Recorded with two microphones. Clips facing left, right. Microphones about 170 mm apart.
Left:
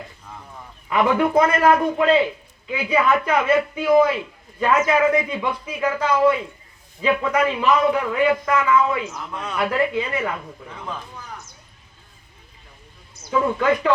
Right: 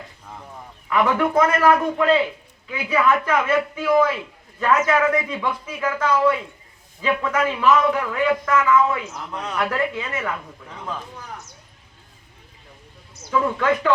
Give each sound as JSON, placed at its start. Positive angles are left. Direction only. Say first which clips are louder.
{"t": 0.9, "sound": "a man's voice", "louder": "left 1 dB", "side_deg": 20}
{"t": 8.2, "sound": "a man's voice", "louder": "even", "side_deg": 15}
{"t": 13.3, "sound": "a man's voice", "louder": "left 1 dB", "side_deg": 15}